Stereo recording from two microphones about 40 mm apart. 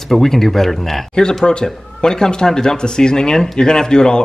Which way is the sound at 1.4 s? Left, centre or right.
Centre.